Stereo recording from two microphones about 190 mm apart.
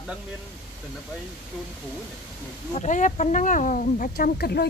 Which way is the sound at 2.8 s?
40° left (ahead or behind).